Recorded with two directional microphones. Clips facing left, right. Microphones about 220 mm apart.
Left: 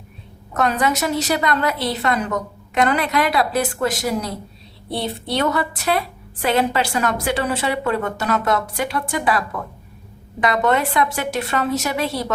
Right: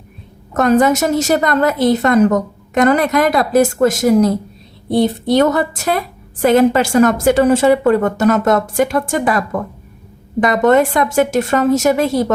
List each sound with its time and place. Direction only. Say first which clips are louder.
0.5 s a woman's voice: right 8 dB; 45° right (ahead or behind)
10.4 s a woman's voice: right 7 dB; 45° right (ahead or behind)